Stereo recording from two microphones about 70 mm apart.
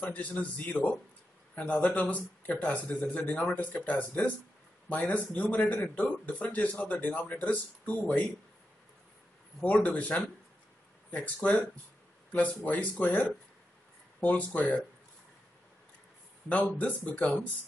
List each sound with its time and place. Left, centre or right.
0.1 s speech: left
9.6 s speech: left
14.2 s speech: left
16.4 s speech: left